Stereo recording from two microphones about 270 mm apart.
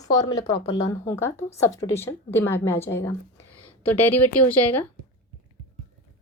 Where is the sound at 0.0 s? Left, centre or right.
Centre.